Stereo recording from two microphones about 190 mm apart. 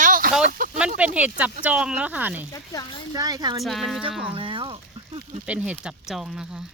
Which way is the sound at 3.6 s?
Centre (ahead or behind).